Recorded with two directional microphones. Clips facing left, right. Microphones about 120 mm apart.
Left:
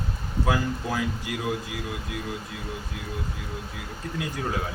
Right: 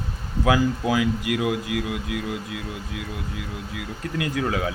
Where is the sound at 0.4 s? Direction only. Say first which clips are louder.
Right 6 dB; 90° right.